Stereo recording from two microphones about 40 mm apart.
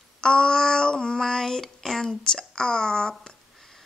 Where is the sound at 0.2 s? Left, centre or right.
Centre.